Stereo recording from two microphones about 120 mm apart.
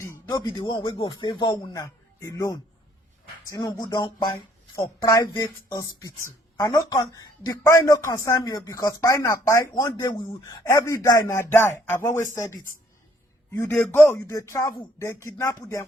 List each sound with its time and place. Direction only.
0.3 s speech: 35° left (ahead or behind)
13.6 s speech: 20° left (ahead or behind); by 15.0 s 35° left (ahead or behind)
15.0 s speech: 25° left (ahead or behind)